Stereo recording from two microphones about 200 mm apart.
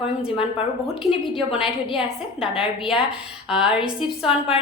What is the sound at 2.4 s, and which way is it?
A woman's voice, 5° right (ahead or behind).